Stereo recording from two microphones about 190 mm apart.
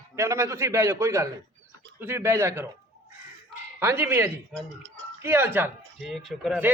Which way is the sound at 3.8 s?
10° right (ahead or behind).